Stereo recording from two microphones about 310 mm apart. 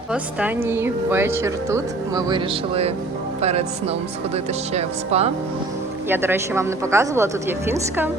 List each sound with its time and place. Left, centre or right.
0.1 s speech: centre
6.1 s speech: centre